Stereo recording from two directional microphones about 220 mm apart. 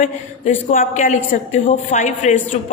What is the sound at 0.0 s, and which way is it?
A woman's voice, 35° left (ahead or behind).